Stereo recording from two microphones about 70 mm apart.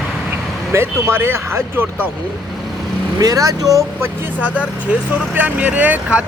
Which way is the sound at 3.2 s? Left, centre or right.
Right.